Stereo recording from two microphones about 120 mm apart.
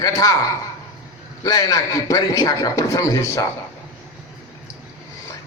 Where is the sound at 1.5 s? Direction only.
30° left (ahead or behind).